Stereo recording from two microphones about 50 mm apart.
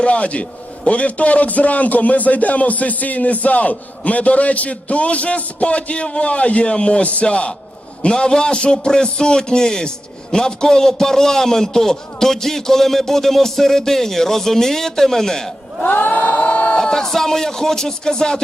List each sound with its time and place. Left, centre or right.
0.0 s a man's voice: left
15.8 s a sound: left
16.7 s a man's voice: centre